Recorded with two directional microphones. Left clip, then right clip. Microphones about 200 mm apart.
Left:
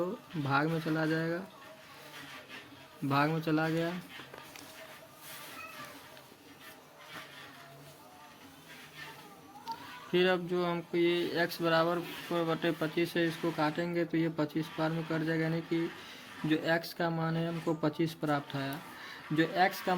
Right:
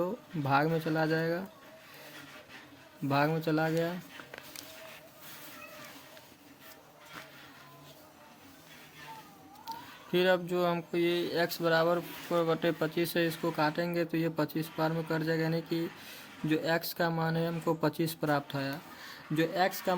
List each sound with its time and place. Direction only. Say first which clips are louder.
0.0 s speech: right 2 dB; 20° right (ahead or behind)
3.1 s speech: right 1 dB; 20° right (ahead or behind)
10.1 s speech: right 1 dB; 20° right (ahead or behind)